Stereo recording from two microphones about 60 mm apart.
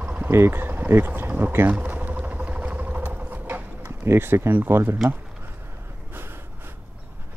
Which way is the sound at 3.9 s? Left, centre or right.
Right.